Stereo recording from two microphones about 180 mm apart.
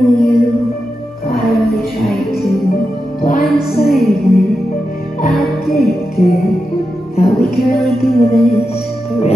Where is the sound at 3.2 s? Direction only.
60° left (ahead or behind).